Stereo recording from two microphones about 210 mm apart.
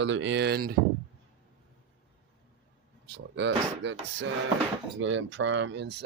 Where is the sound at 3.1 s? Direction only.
55° right (ahead or behind).